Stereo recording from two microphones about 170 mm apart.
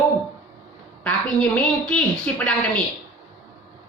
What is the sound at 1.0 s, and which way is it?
Speech, 5° left (ahead or behind).